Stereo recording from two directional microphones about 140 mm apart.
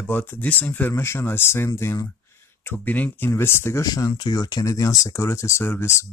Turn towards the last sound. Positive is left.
turn(degrees=20)  # may be behind; listen again after turning